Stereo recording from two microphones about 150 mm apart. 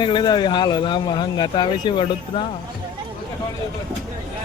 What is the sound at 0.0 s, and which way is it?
Speech, 30° left (ahead or behind).